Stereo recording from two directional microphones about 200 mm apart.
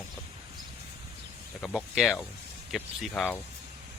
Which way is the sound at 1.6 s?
Centre (ahead or behind).